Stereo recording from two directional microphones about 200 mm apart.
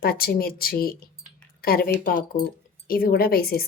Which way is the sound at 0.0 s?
50° left (ahead or behind).